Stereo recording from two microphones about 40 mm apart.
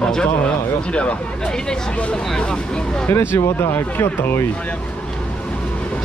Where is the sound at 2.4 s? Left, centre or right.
Left.